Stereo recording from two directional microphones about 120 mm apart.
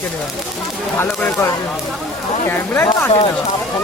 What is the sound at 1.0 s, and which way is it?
Speech, 20° left (ahead or behind).